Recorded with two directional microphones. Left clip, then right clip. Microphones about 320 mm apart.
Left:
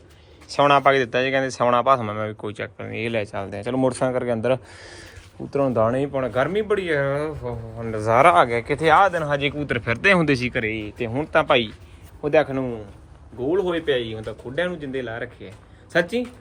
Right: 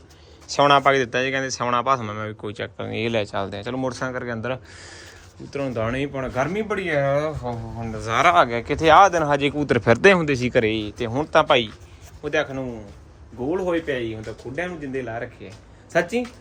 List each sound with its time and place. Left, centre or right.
0.4 s speech: centre
4.0 s speech: centre
4.4 s speech: centre
5.5 s speech: centre
5.9 s speech: centre
10.8 s speech: right
11.1 s speech: centre
12.2 s a man's voice: left
13.5 s speech: centre